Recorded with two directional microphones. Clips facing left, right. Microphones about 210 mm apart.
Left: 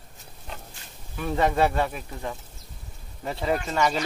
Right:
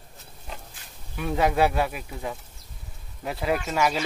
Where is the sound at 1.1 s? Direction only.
5° right (ahead or behind).